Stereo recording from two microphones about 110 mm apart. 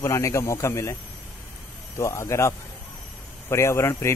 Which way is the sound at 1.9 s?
25° left (ahead or behind).